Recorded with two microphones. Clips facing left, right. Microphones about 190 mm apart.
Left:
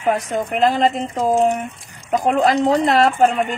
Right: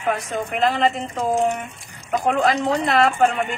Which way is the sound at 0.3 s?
35° left (ahead or behind).